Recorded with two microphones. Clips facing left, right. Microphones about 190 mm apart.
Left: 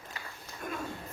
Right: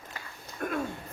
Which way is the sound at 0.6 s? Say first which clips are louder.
Right 6 dB; 60° right (ahead or behind).